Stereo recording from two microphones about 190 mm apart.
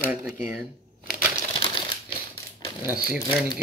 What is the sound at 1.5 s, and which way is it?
Crumpling, 25° left (ahead or behind).